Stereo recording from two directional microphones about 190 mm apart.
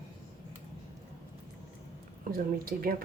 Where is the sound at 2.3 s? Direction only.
50° right (ahead or behind).